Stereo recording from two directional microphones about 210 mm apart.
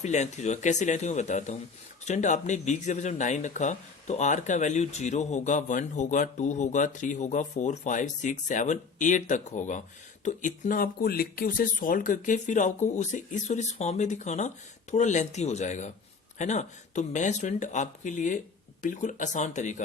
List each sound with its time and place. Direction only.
0.0 s speech: 35° left (ahead or behind)